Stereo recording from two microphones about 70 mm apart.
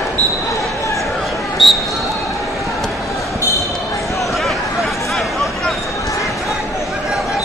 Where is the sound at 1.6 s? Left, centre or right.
Centre.